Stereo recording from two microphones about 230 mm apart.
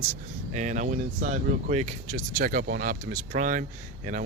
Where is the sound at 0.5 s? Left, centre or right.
Right.